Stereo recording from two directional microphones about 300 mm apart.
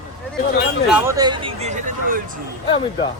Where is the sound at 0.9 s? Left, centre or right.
Centre.